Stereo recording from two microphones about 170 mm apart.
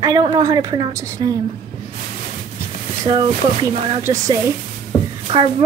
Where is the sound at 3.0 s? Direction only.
25° right (ahead or behind).